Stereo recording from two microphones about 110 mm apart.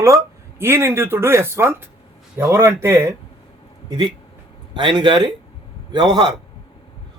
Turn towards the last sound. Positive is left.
turn(degrees=-40)  # may be behind; listen again after turning